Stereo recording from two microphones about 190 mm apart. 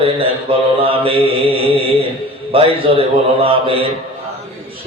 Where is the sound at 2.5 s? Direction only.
30° right (ahead or behind).